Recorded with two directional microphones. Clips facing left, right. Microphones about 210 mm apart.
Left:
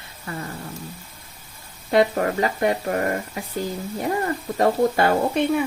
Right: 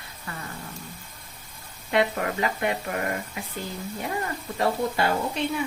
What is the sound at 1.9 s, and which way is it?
Speech, 40° left (ahead or behind).